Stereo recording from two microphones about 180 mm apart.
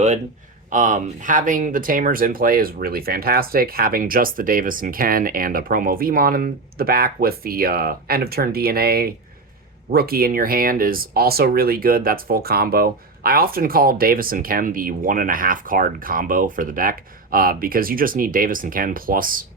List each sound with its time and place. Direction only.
0.7 s speech: 45° right (ahead or behind)